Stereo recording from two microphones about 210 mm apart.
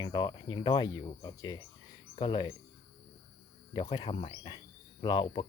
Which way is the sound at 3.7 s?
20° left (ahead or behind).